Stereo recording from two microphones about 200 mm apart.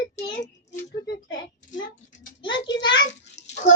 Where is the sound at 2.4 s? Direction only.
25° left (ahead or behind).